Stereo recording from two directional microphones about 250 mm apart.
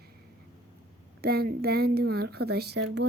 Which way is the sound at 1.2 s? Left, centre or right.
Right.